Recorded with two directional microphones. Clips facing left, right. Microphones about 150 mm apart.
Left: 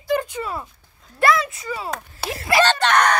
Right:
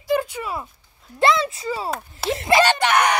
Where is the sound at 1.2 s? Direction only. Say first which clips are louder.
Even; 25° right (ahead or behind).